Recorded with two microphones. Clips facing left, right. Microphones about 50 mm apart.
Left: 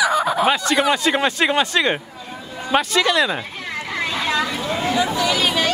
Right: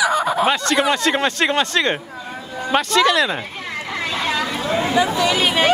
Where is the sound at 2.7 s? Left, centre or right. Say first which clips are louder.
Right 2 dB; centre.